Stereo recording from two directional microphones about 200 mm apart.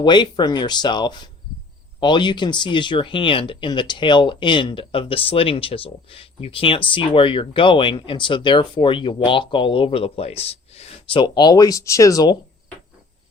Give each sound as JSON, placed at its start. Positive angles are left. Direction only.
{"t": 0.0, "sound": "speech", "side_deg": 20}